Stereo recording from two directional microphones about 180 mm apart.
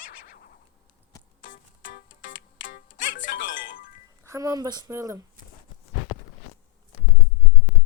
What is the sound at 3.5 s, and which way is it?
Music, 50° left (ahead or behind).